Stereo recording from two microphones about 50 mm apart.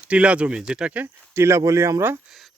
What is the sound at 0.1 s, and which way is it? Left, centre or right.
Speech, right.